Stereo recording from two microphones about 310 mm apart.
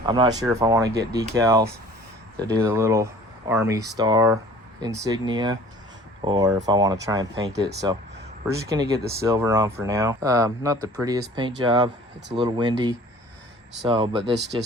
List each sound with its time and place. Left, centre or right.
0.0 s speech: centre
7.5 s speech: right
8.4 s speech: centre